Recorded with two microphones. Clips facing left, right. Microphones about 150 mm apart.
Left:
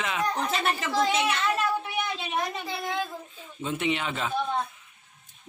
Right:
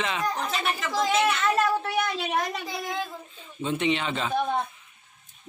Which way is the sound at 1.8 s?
90° right.